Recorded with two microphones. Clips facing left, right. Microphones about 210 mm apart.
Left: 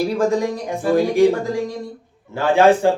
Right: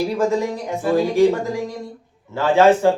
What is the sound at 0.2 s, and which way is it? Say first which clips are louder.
Speech: left 1 dB; 15° left (ahead or behind).